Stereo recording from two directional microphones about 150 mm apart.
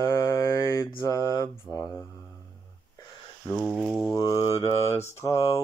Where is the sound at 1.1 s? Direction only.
25° right (ahead or behind).